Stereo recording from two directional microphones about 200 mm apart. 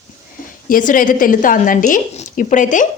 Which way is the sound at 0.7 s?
40° left (ahead or behind).